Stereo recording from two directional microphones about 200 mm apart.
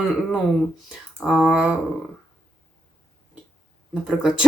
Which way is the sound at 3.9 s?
Centre (ahead or behind).